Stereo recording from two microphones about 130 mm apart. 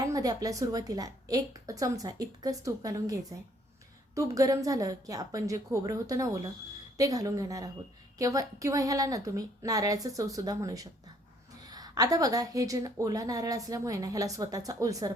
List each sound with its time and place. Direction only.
0.0 s a woman's voice: 25° right (ahead or behind)